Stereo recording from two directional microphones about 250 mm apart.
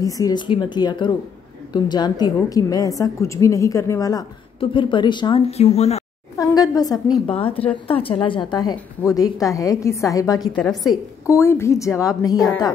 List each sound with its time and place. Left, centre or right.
0.0 s a woman's voice: centre
6.3 s a woman's voice: centre
10.6 s a woman's voice: centre